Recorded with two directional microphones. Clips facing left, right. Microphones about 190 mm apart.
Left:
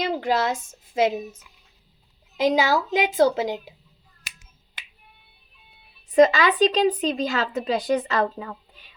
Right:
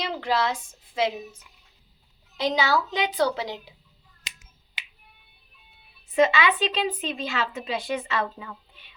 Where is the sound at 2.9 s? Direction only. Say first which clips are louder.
Left 5 dB; 45° left (ahead or behind).